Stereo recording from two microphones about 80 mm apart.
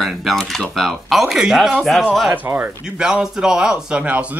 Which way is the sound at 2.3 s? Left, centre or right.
Right.